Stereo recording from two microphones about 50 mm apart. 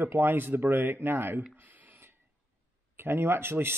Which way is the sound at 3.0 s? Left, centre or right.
Right.